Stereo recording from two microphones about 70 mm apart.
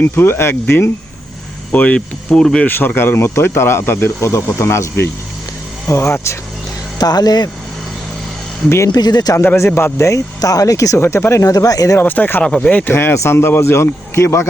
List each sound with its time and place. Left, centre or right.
0.0 s speech: left
1.7 s speech: left
2.6 s speech: left
7.0 s speech: left
8.9 s speech: left
9.6 s speech: left
10.0 s speech: left
10.9 s speech: left
11.4 s speech: left
11.9 s speech: left
12.4 s speech: centre
12.9 s speech: left